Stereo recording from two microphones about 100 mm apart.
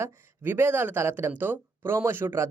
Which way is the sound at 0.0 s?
25° right (ahead or behind).